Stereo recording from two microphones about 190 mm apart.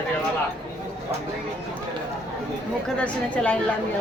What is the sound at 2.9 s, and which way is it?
Speech, 5° left (ahead or behind).